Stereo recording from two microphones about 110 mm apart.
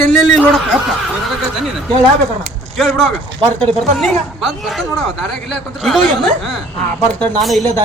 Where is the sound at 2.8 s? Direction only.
Centre (ahead or behind).